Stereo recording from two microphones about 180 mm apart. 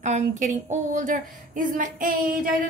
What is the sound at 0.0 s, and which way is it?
A woman's voice, 40° right (ahead or behind).